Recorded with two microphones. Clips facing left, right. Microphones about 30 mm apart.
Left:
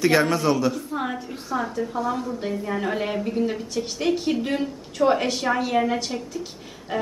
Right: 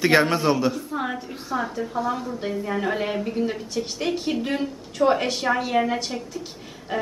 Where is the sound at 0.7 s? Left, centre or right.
Centre.